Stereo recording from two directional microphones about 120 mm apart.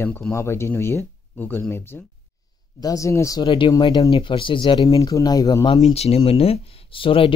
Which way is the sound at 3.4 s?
45° left (ahead or behind).